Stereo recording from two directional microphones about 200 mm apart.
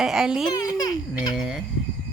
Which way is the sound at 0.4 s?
20° left (ahead or behind).